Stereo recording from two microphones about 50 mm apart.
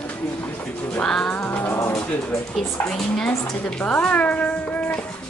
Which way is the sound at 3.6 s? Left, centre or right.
Left.